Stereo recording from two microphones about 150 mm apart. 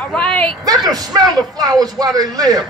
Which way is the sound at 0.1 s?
10° left (ahead or behind).